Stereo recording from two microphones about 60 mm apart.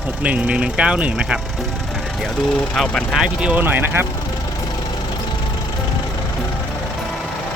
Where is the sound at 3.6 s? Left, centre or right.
Right.